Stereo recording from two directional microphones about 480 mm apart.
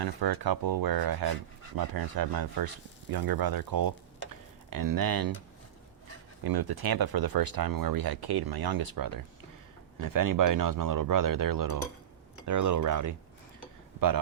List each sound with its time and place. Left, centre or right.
0.0 s speech: right
6.4 s speech: right